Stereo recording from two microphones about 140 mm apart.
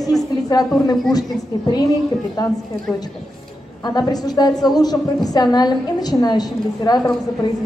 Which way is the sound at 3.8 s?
30° left (ahead or behind).